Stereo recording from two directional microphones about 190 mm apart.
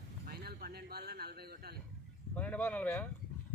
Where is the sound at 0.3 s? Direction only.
55° right (ahead or behind).